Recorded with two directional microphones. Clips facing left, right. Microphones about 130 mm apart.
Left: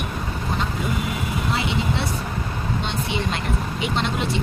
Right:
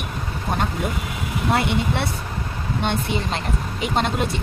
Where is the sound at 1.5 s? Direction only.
55° right (ahead or behind).